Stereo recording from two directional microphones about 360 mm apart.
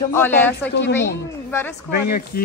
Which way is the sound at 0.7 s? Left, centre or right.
Left.